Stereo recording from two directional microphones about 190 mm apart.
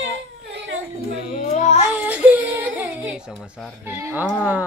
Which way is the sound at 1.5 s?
35° left (ahead or behind).